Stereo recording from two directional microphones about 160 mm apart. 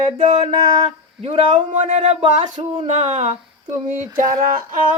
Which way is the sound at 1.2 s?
40° right (ahead or behind).